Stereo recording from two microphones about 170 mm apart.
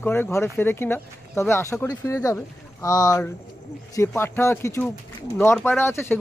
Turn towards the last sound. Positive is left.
turn(degrees=15)  # may be behind; listen again after turning